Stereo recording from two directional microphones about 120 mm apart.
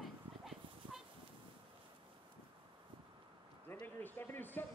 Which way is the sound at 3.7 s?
15° left (ahead or behind).